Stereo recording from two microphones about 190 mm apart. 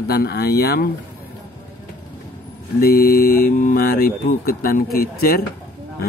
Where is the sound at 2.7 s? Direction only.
50° left (ahead or behind).